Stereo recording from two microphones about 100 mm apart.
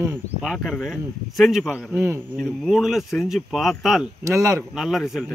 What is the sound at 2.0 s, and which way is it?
Speech, 25° right (ahead or behind).